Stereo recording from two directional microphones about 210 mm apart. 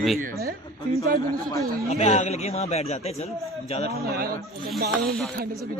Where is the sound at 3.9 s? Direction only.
45° right (ahead or behind).